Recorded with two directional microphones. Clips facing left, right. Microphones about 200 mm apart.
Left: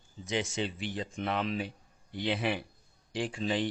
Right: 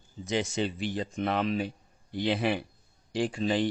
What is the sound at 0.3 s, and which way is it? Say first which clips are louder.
Speech: right 4 dB; 40° right (ahead or behind).